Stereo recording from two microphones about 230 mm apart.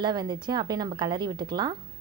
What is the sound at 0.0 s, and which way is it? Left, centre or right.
A woman's voice, centre.